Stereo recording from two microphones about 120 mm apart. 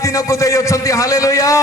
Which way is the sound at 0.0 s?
25° left (ahead or behind).